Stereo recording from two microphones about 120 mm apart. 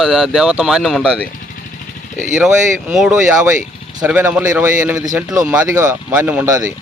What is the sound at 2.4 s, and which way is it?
Speech, 5° right (ahead or behind).